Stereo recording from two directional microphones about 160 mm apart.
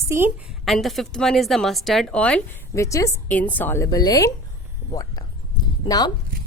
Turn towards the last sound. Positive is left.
turn(degrees=25)  # may be behind; listen again after turning